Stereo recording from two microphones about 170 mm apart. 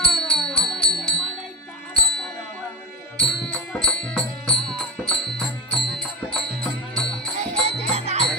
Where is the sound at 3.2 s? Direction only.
5° left (ahead or behind).